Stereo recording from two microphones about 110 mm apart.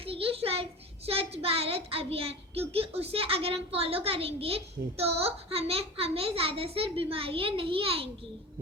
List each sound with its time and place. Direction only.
0.0 s a child's voice: 60° right (ahead or behind)